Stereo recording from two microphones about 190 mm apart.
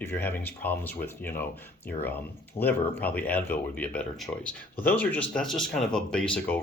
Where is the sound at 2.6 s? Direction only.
10° left (ahead or behind).